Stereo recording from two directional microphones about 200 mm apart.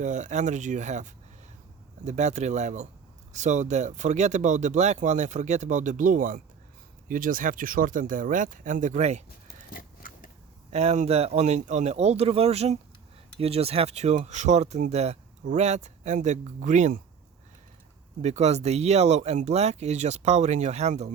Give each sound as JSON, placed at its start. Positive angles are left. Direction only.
{"t": 0.0, "sound": "speech", "side_deg": -35}
{"t": 9.5, "sound": "a sound", "side_deg": 45}
{"t": 10.7, "sound": "speech", "side_deg": -35}
{"t": 18.2, "sound": "speech", "side_deg": -35}